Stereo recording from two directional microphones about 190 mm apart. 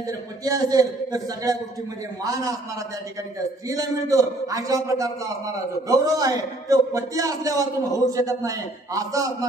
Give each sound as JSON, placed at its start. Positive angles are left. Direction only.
{"t": 0.0, "sound": "a man's voice", "side_deg": -20}
{"t": 3.6, "sound": "a man's voice", "side_deg": -15}